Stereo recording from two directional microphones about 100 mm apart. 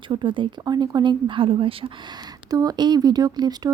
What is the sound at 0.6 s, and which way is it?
Speech, 45° right (ahead or behind).